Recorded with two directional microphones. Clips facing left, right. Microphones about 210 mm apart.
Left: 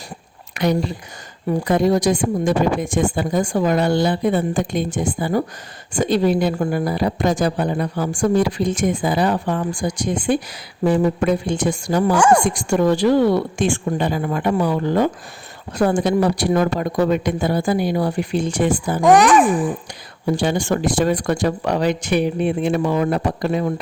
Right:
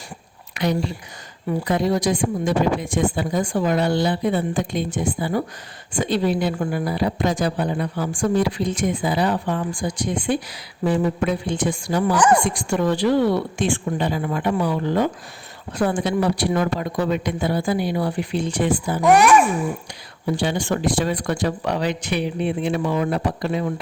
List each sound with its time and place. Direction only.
0.5 s whispering: 45° left (ahead or behind)
1.5 s speech: 45° left (ahead or behind)
19.0 s a child's voice: 15° left (ahead or behind)
19.4 s a child's voice: 30° left (ahead or behind)
20.2 s speech: 45° left (ahead or behind)